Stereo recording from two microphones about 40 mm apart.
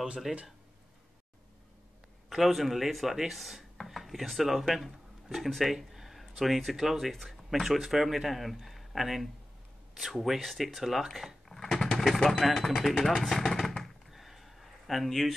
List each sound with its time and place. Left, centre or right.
0.3 s speech: centre
2.2 s speech: centre
14.1 s a sound: centre